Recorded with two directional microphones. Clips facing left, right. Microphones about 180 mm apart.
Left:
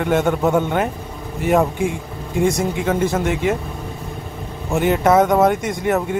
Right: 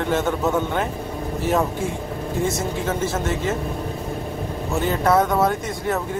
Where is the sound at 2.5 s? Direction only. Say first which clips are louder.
Left 5 dB; 15° left (ahead or behind).